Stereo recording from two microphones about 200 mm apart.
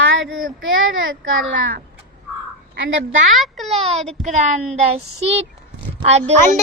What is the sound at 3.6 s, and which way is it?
Speech, 30° right (ahead or behind).